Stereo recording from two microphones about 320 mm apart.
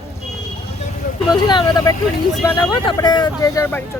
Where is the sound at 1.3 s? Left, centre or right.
Centre.